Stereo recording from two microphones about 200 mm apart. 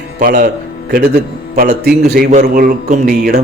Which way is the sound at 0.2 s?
45° right (ahead or behind).